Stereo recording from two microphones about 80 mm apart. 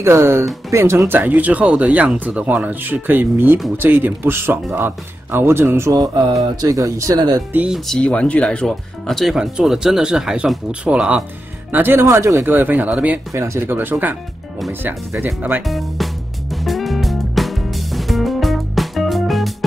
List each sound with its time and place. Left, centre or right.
0.0 s speech: right
6.5 s speech: right
7.2 s speech: right
7.7 s speech: centre
9.3 s speech: centre
11.7 s speech: right
12.4 s speech: right
13.3 s speech: right
15.6 s music: centre